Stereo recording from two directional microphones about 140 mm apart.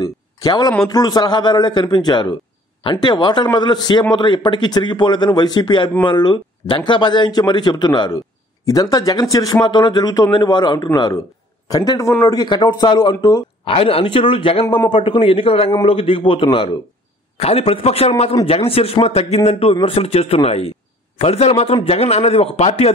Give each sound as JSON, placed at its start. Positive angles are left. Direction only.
{"t": 0.0, "sound": "a sound", "side_deg": 30}
{"t": 0.7, "sound": "speech", "side_deg": 30}
{"t": 13.7, "sound": "a man's voice", "side_deg": 45}